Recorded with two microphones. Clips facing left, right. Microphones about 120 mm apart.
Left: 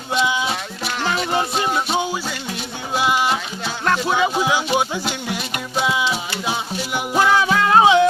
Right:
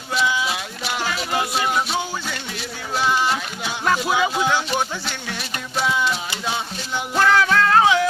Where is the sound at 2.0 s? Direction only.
15° left (ahead or behind).